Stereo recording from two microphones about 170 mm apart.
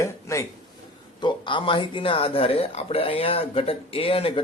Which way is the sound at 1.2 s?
30° left (ahead or behind).